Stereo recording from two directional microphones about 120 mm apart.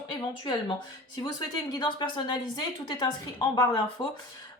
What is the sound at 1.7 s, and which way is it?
Speech, 40° left (ahead or behind).